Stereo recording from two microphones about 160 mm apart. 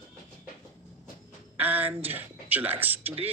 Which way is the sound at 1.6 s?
10° right (ahead or behind).